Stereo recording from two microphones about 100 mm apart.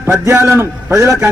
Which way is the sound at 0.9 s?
30° right (ahead or behind).